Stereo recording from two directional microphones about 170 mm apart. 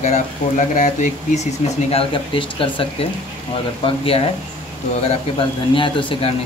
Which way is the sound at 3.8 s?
35° left (ahead or behind).